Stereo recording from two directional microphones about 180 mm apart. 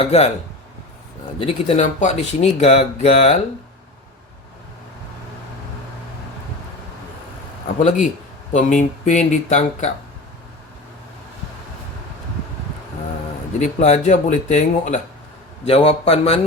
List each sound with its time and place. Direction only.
0.0 s speech: 35° left (ahead or behind)
1.4 s speech: 30° left (ahead or behind)
8.5 s speech: 40° left (ahead or behind)
13.6 s speech: 40° left (ahead or behind)